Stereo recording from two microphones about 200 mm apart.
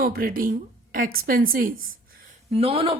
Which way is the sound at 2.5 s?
30° right (ahead or behind).